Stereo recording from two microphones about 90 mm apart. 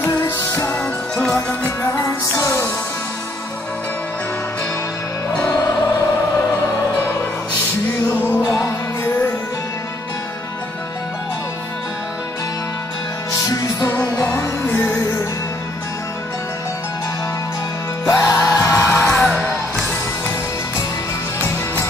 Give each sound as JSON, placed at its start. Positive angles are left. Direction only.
{"t": 0.0, "sound": "music", "side_deg": 30}
{"t": 2.3, "sound": "music", "side_deg": 35}
{"t": 8.2, "sound": "music", "side_deg": 25}
{"t": 13.5, "sound": "music", "side_deg": 40}
{"t": 14.7, "sound": "music", "side_deg": 25}
{"t": 18.0, "sound": "music", "side_deg": 35}
{"t": 19.1, "sound": "music", "side_deg": -5}